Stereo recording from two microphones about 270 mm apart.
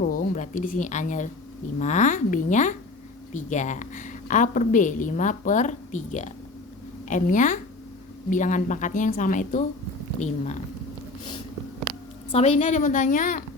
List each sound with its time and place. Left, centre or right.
0.0 s a woman's voice: left
12.3 s a woman's voice: left